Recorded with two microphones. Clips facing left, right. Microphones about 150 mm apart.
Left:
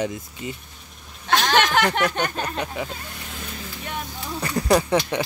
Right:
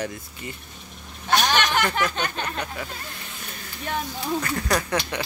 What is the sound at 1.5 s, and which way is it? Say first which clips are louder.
Speech: left 3 dB; 90° left.